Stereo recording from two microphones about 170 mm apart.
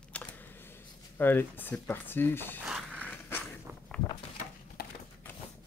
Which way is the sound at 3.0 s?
10° left (ahead or behind).